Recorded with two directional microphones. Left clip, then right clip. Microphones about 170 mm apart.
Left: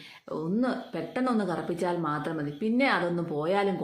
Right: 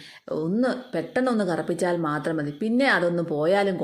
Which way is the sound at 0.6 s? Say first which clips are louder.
Right 5 dB; 30° right (ahead or behind).